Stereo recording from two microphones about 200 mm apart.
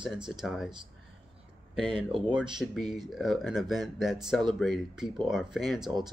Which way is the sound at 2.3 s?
5° right (ahead or behind).